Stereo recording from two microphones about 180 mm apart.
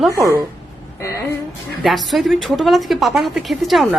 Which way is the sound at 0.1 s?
15° right (ahead or behind).